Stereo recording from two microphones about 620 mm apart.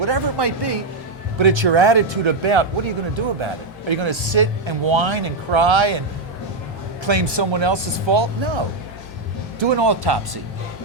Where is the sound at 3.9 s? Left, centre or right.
Right.